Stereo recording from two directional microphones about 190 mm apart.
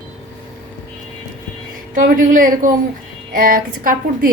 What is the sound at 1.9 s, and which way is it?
A woman's voice, 45° right (ahead or behind).